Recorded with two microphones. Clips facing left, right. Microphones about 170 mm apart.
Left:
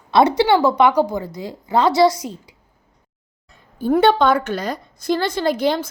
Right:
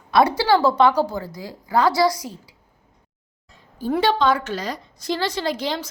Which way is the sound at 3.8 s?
55° left (ahead or behind).